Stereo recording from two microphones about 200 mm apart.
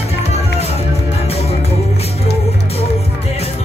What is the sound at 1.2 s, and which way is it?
Music, 30° left (ahead or behind).